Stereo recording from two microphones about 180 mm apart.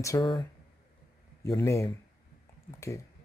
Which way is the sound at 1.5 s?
15° left (ahead or behind).